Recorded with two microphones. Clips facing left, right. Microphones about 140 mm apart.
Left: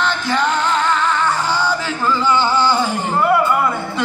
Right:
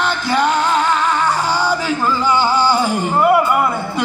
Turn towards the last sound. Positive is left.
turn(degrees=-10)  # may be behind; listen again after turning